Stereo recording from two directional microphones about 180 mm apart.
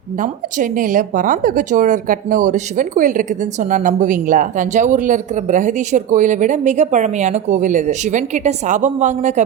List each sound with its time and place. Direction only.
0.2 s speech: 45° right (ahead or behind)